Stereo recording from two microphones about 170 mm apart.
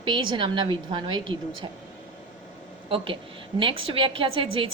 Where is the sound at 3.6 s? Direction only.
30° right (ahead or behind).